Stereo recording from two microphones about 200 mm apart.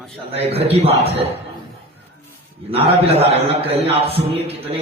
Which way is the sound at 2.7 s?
30° right (ahead or behind).